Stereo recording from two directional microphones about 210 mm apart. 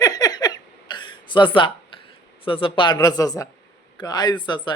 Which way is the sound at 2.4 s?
25° left (ahead or behind).